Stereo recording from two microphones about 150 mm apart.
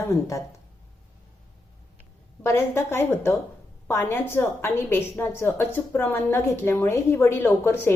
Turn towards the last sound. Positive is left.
turn(degrees=15)  # may be behind; listen again after turning